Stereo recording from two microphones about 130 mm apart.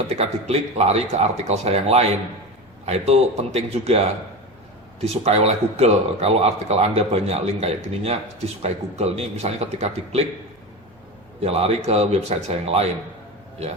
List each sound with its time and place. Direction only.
0.2 s speech: 55° right (ahead or behind)
11.3 s speech: 55° right (ahead or behind)